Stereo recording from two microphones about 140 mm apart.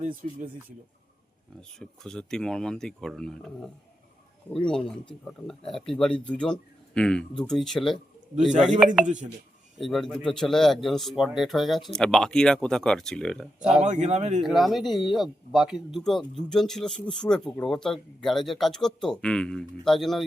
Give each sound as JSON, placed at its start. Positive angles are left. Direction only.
{"t": 0.0, "sound": "speech", "side_deg": -80}
{"t": 1.8, "sound": "speech", "side_deg": 5}
{"t": 9.7, "sound": "speech", "side_deg": 0}
{"t": 13.6, "sound": "speech", "side_deg": -5}
{"t": 13.8, "sound": "speech", "side_deg": -55}
{"t": 14.4, "sound": "speech", "side_deg": 0}